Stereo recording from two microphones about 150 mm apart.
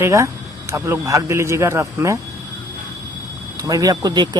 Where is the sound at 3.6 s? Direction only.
25° right (ahead or behind).